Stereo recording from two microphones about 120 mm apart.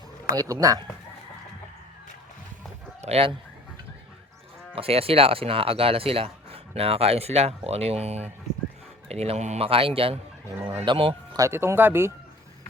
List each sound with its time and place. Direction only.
0.3 s speech: 30° right (ahead or behind)
3.0 s speech: 55° right (ahead or behind)
4.7 s speech: 50° right (ahead or behind)
10.6 s speech: 15° right (ahead or behind)
10.8 s speech: 50° right (ahead or behind)
11.3 s speech: 20° right (ahead or behind)